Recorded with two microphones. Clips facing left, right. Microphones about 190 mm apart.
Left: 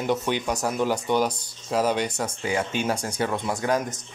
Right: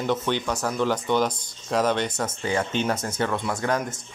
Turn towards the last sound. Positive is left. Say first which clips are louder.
# left 1 dB
turn(degrees=15)  # may be behind; listen again after turning